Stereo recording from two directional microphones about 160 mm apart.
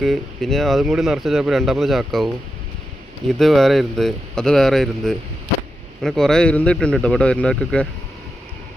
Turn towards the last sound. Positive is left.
turn(degrees=5)  # may be behind; listen again after turning